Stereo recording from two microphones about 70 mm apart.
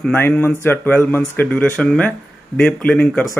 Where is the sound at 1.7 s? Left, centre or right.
Centre.